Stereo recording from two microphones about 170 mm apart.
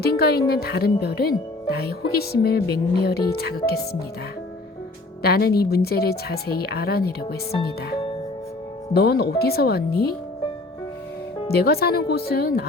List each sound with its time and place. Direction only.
0.0 s speech: 65° left (ahead or behind)
5.2 s speech: 65° left (ahead or behind)
8.9 s speech: 70° left (ahead or behind)
11.5 s speech: 65° left (ahead or behind)